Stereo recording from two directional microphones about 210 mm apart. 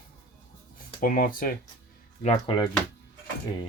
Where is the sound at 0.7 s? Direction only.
40° left (ahead or behind).